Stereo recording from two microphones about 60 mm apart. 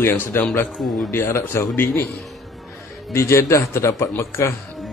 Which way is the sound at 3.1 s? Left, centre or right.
Left.